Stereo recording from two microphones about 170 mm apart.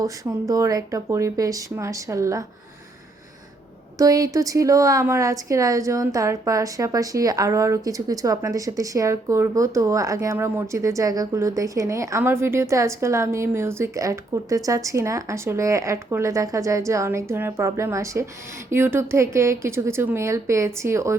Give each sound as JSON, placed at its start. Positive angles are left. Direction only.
{"t": 0.0, "sound": "speech", "side_deg": -20}
{"t": 3.9, "sound": "a woman's voice", "side_deg": -20}